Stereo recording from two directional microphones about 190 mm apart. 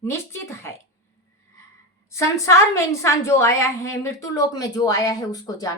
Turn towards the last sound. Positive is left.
turn(degrees=20)  # may be behind; listen again after turning